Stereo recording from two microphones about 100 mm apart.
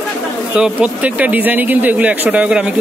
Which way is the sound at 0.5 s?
10° right (ahead or behind).